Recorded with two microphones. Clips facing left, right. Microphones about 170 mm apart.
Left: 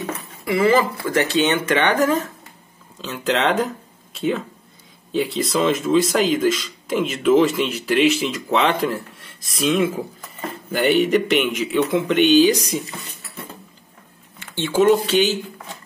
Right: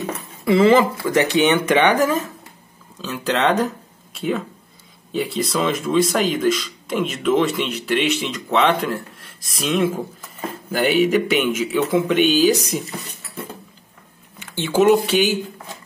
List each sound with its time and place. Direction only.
0.5 s speech: 20° right (ahead or behind)
3.0 s speech: centre (ahead or behind)
14.4 s speech: 10° right (ahead or behind)